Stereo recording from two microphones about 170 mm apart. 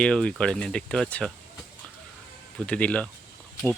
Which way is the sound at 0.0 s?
5° left (ahead or behind).